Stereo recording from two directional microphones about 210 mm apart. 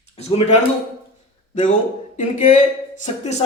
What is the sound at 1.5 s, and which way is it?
Speech, 35° left (ahead or behind).